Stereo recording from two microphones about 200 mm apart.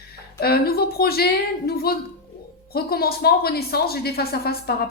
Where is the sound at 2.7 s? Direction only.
50° left (ahead or behind).